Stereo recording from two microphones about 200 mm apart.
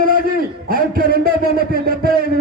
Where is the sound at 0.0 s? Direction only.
45° right (ahead or behind).